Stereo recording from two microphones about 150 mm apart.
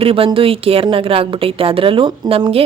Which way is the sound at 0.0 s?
40° right (ahead or behind).